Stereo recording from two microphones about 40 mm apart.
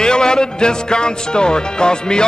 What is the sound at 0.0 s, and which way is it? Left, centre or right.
Speech, centre.